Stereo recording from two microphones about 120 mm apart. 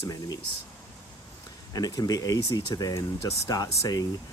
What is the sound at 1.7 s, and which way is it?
Speech, 35° left (ahead or behind).